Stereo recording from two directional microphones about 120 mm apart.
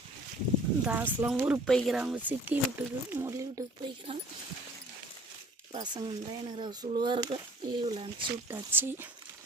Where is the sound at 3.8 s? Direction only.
50° right (ahead or behind).